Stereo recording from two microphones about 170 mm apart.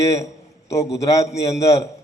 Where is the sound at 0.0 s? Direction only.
20° left (ahead or behind).